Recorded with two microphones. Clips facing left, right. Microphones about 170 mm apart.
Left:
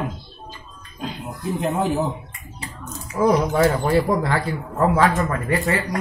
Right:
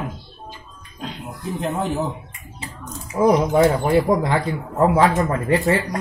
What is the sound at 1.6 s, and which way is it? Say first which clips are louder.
Speech: left 2 dB; centre (ahead or behind).